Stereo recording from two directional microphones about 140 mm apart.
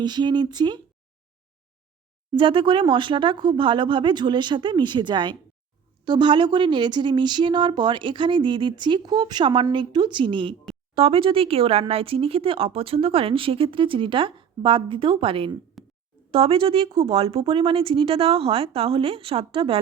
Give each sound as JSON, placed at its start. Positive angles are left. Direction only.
{"t": 0.0, "sound": "speech", "side_deg": -30}
{"t": 2.3, "sound": "speech", "side_deg": -40}
{"t": 15.8, "sound": "a sound", "side_deg": 0}
{"t": 16.3, "sound": "speech", "side_deg": -40}
{"t": 17.2, "sound": "speech", "side_deg": -45}